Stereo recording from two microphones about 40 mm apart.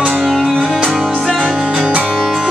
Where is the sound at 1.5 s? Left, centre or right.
Centre.